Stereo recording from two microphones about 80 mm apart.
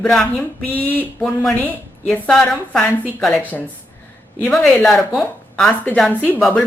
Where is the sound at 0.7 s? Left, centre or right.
Left.